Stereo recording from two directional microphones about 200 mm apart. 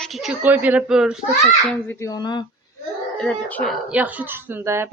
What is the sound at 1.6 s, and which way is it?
Speech, 15° left (ahead or behind).